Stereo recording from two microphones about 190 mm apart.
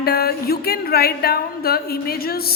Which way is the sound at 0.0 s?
55° left (ahead or behind).